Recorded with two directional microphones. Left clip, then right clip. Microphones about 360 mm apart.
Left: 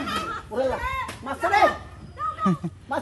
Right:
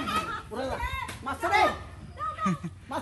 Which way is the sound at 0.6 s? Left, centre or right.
Centre.